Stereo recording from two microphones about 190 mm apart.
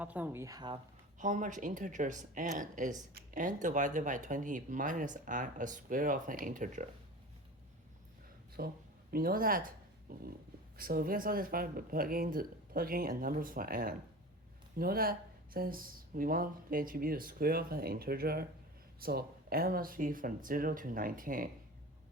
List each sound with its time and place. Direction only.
0.0 s speech: 10° right (ahead or behind)
1.2 s speech: 45° right (ahead or behind)
8.6 s speech: 55° right (ahead or behind)